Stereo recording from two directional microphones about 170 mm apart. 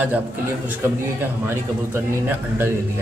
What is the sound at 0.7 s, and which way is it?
A man's voice, 10° right (ahead or behind).